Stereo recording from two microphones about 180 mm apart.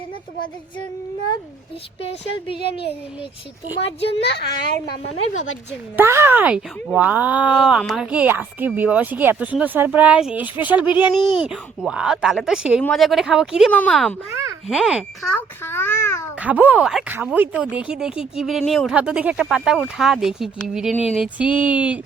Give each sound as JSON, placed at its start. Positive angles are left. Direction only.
{"t": 3.8, "sound": "a child's voice", "side_deg": 75}
{"t": 6.0, "sound": "speech", "side_deg": -15}
{"t": 11.2, "sound": "a child's voice", "side_deg": 25}
{"t": 11.4, "sound": "a child's voice", "side_deg": -5}
{"t": 14.3, "sound": "a sound", "side_deg": -15}
{"t": 14.7, "sound": "speech", "side_deg": -5}
{"t": 15.4, "sound": "a child's voice", "side_deg": 15}
{"t": 16.4, "sound": "speech", "side_deg": -10}
{"t": 20.9, "sound": "a sound", "side_deg": 35}
{"t": 21.2, "sound": "speech", "side_deg": -5}